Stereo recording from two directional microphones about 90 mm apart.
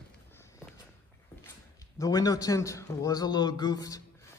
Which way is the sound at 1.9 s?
40° left (ahead or behind).